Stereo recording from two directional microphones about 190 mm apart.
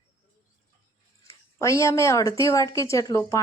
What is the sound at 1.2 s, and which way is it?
A woman's voice, 15° left (ahead or behind).